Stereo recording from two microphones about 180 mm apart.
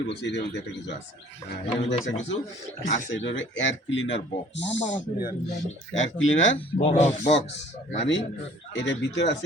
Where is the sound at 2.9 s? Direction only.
90° left.